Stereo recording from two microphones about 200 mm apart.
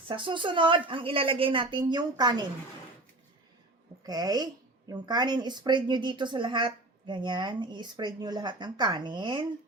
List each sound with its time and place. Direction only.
0.1 s a woman's voice: 25° right (ahead or behind)
4.0 s a woman's voice: 20° right (ahead or behind)